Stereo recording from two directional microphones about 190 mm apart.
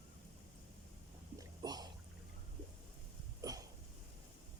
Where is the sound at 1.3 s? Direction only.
20° right (ahead or behind).